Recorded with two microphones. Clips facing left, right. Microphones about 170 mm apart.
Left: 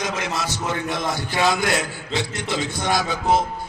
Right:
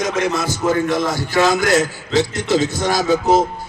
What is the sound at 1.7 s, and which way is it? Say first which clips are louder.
Speech: right 8 dB; 45° right (ahead or behind).